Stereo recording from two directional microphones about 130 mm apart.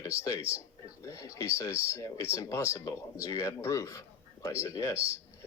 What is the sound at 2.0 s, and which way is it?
Speech, 25° left (ahead or behind).